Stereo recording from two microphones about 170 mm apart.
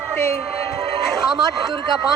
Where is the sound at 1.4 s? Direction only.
25° right (ahead or behind).